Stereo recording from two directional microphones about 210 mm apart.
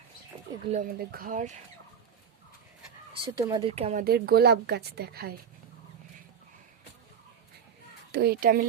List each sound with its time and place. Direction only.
0.7 s speech: 40° right (ahead or behind)
3.1 s speech: 25° right (ahead or behind)
4.0 s speech: 50° right (ahead or behind)
8.1 s speech: 50° right (ahead or behind)